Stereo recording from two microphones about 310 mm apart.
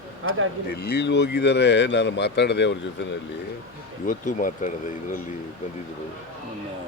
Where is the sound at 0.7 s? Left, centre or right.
Left.